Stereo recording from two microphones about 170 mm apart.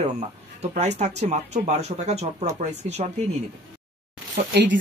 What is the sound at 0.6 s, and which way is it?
Speech, 40° right (ahead or behind).